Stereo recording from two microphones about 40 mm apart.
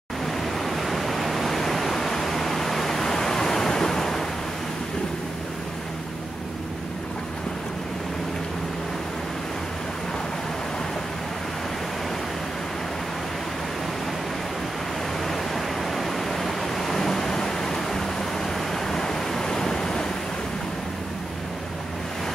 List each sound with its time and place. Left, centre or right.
0.4 s pink noise: centre
15.2 s pink noise: centre